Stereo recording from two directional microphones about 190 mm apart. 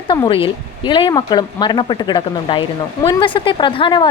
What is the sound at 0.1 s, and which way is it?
Speech, 25° left (ahead or behind).